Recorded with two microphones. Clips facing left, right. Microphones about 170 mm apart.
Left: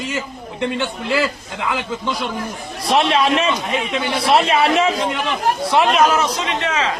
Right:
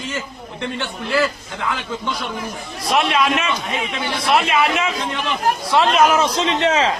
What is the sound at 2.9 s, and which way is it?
A man's voice, 30° left (ahead or behind).